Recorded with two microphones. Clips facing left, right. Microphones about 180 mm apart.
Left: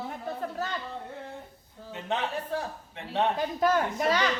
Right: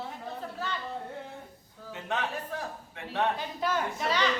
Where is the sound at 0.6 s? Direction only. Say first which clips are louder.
Even; 45° left (ahead or behind).